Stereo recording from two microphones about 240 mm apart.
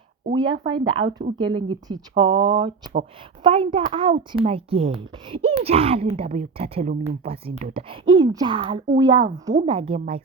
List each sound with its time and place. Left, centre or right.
0.3 s a child's voice: centre